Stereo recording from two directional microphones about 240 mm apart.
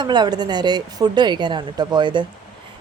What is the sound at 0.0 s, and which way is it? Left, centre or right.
Speech, centre.